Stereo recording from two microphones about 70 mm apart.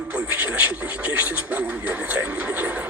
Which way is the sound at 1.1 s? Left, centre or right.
Right.